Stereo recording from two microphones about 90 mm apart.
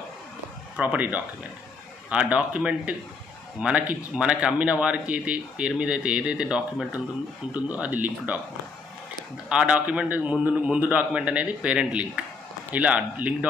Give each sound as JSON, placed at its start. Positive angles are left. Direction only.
{"t": 0.7, "sound": "speech", "side_deg": -15}
{"t": 9.5, "sound": "speech", "side_deg": -15}